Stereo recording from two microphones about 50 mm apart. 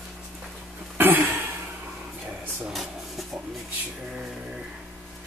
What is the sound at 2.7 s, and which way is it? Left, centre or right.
Rub, centre.